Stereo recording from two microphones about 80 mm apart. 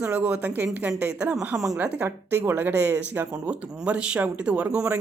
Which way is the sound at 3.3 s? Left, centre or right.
Centre.